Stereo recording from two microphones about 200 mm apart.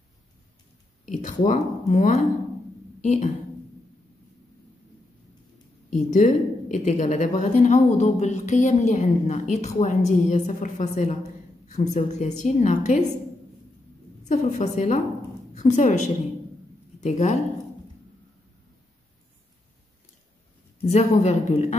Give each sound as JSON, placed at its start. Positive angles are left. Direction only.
{"t": 1.0, "sound": "a woman's voice", "side_deg": 40}
{"t": 5.9, "sound": "a woman's voice", "side_deg": 40}
{"t": 14.2, "sound": "a woman's voice", "side_deg": 35}
{"t": 20.8, "sound": "a woman's voice", "side_deg": 35}